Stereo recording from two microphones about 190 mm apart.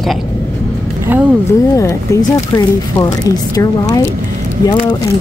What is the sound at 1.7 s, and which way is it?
Speech, 15° left (ahead or behind).